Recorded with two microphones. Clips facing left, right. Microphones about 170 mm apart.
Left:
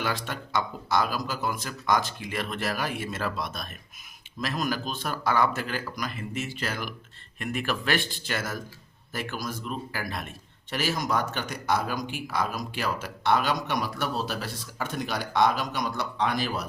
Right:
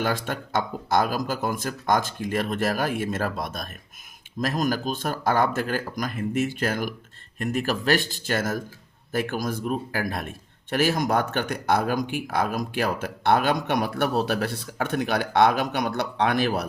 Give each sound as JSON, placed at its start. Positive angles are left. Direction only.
{"t": 0.0, "sound": "a man's voice", "side_deg": -50}